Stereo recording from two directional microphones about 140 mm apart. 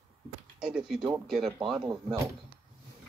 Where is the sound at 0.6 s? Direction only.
5° right (ahead or behind).